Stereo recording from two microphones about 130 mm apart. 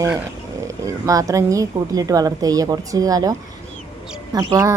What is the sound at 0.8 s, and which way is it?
A woman's voice, 25° right (ahead or behind).